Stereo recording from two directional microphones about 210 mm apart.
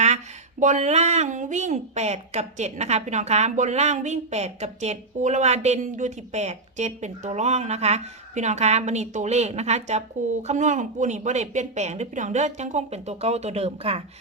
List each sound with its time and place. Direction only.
0.6 s a woman's voice: 35° right (ahead or behind)